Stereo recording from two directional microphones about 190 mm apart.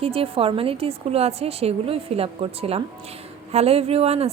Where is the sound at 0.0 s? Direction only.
30° right (ahead or behind).